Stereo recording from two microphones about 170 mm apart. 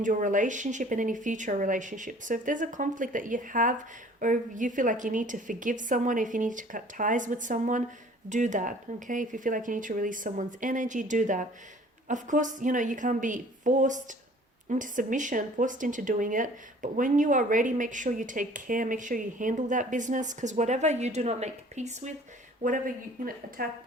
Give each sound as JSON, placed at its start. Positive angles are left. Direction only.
{"t": 0.0, "sound": "speech", "side_deg": -50}
{"t": 23.6, "sound": "a woman's voice", "side_deg": -60}